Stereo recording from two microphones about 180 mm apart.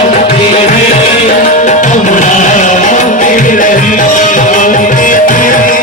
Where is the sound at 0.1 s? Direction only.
40° left (ahead or behind).